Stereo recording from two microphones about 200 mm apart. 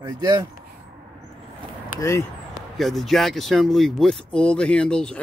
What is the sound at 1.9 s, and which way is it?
Speech, 15° left (ahead or behind).